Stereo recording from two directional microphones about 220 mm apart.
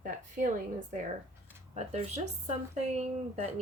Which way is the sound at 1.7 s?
30° right (ahead or behind).